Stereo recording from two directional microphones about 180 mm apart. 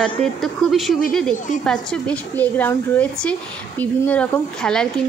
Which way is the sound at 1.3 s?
45° left (ahead or behind).